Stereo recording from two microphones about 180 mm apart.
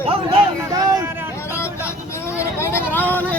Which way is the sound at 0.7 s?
20° right (ahead or behind).